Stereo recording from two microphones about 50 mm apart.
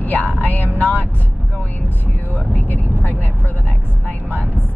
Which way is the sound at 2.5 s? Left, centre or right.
Left.